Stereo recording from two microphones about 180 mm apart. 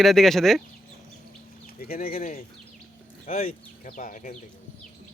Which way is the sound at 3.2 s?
40° left (ahead or behind).